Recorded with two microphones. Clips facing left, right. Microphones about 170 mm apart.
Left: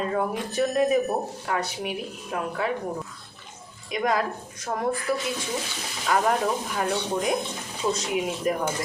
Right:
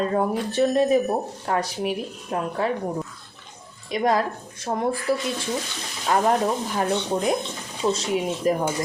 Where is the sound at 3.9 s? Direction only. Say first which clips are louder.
Right 3 dB; 35° right (ahead or behind).